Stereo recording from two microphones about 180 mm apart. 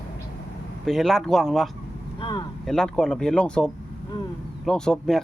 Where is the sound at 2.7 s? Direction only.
5° left (ahead or behind).